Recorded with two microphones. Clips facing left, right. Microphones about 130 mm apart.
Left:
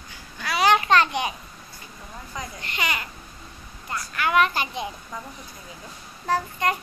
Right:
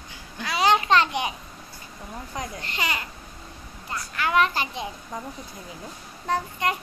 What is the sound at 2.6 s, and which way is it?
Speech, 30° right (ahead or behind).